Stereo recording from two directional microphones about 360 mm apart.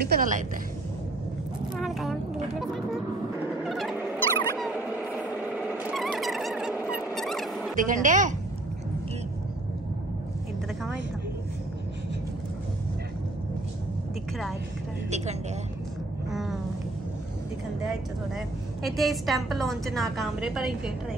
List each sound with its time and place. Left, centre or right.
0.1 s speech: right
1.8 s a sound: centre
3.6 s turkey: centre
7.7 s speech: right
15.0 s speech: centre
16.3 s a sound: centre
18.8 s a woman's voice: centre